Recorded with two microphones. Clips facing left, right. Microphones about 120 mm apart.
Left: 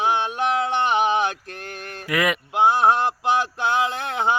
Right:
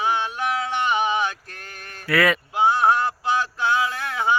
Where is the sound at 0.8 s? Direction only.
55° left (ahead or behind).